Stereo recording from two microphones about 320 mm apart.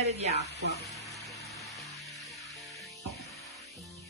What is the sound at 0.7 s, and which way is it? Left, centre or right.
Speech, centre.